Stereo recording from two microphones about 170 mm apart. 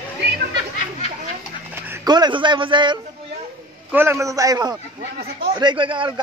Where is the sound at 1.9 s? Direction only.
25° right (ahead or behind).